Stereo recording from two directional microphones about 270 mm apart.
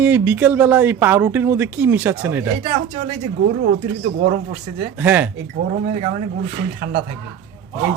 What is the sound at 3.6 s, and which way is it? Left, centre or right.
Speech, right.